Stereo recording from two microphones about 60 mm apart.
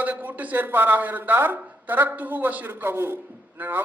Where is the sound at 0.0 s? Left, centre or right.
Right.